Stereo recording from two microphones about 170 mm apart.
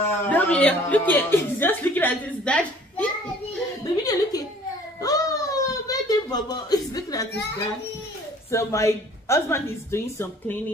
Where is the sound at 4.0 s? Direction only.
20° left (ahead or behind).